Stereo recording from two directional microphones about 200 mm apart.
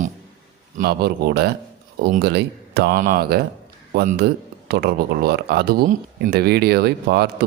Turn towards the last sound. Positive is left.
turn(degrees=-55)  # may be behind; listen again after turning